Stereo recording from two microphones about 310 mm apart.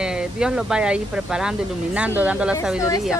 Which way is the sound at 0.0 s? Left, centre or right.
Centre.